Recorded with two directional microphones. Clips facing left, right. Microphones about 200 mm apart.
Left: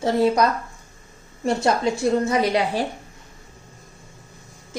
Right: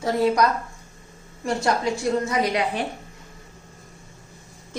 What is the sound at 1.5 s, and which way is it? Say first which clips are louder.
A woman's voice: left 3 dB; 25° left (ahead or behind).